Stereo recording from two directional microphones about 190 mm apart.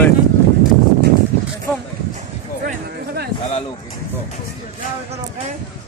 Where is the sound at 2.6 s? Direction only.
55° right (ahead or behind).